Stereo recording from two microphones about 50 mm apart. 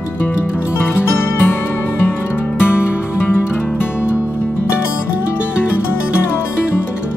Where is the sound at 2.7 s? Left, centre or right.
Left.